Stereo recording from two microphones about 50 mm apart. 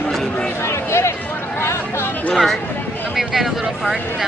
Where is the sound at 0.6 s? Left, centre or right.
Left.